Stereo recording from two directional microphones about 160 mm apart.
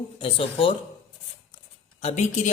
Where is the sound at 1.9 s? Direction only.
40° left (ahead or behind).